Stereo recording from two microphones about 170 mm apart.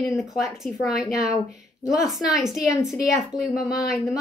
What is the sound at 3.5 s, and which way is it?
Speech, 65° left (ahead or behind).